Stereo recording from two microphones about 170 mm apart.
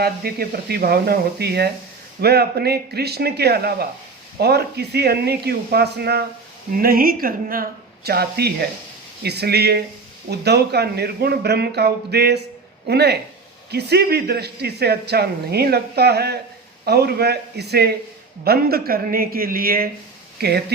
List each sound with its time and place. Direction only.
0.0 s speech: 65° right (ahead or behind)
6.7 s a woman's voice: 60° right (ahead or behind)